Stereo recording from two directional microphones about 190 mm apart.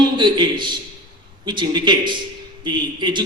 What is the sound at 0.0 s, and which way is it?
A man's voice, 25° right (ahead or behind).